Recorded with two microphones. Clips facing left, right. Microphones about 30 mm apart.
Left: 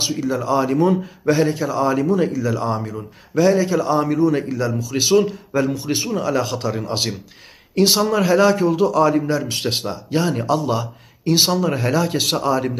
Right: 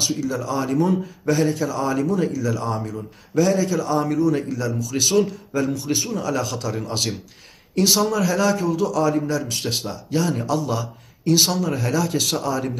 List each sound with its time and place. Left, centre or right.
0.0 s a man's voice: left